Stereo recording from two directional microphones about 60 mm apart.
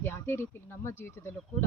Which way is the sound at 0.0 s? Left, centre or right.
Left.